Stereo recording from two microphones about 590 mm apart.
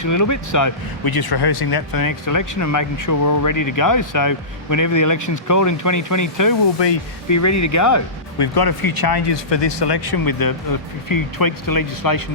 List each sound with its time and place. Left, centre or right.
0.0 s speech: left